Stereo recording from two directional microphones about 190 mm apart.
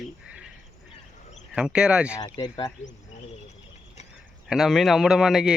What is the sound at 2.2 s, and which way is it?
Speech, 25° left (ahead or behind).